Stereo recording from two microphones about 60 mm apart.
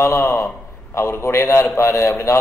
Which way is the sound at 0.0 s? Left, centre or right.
Left.